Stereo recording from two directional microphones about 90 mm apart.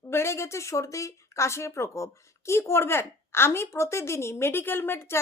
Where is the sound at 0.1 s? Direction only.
30° left (ahead or behind).